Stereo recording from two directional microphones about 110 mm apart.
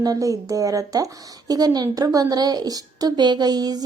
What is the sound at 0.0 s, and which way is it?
Speech, 35° right (ahead or behind).